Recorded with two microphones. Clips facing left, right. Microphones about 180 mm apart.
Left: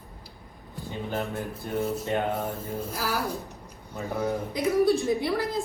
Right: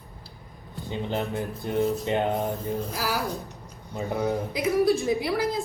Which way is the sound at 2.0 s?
15° right (ahead or behind).